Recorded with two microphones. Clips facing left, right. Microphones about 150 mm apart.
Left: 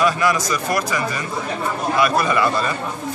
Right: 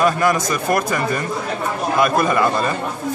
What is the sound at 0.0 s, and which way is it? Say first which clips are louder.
A man's voice: right 2 dB; 50° right (ahead or behind).